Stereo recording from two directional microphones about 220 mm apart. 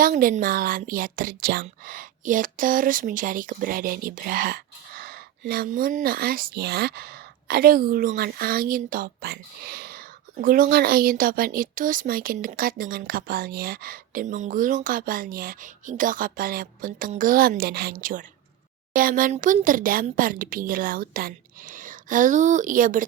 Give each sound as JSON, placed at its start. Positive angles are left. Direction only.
{"t": 0.0, "sound": "a woman's voice", "side_deg": -40}